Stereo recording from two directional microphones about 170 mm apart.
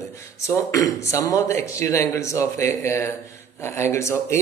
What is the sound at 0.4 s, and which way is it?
A man's voice, 15° left (ahead or behind).